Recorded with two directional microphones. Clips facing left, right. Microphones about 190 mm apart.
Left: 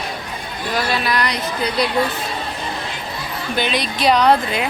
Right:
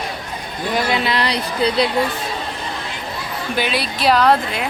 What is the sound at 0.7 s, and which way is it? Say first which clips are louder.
Speech: right 1 dB; 25° right (ahead or behind).